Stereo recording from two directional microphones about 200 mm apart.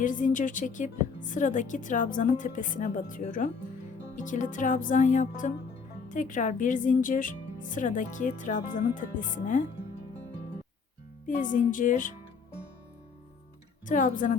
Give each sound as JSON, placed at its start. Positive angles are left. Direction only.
{"t": 0.0, "sound": "speech", "side_deg": 40}
{"t": 11.3, "sound": "speech", "side_deg": 40}
{"t": 13.8, "sound": "speech", "side_deg": 40}